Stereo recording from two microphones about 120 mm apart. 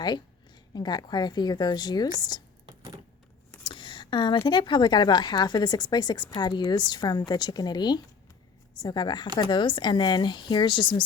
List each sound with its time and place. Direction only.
0.7 s a woman's voice: 35° left (ahead or behind)
3.6 s a sound: 45° left (ahead or behind)
4.4 s a woman's voice: 40° left (ahead or behind)